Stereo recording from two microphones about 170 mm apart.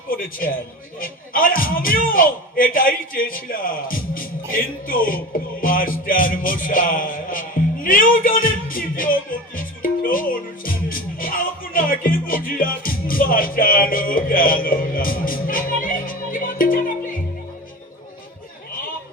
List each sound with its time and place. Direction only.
0.1 s a man's voice: 55° left (ahead or behind)